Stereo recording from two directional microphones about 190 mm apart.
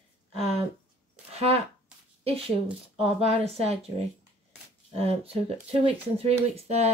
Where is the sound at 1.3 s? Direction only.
30° right (ahead or behind).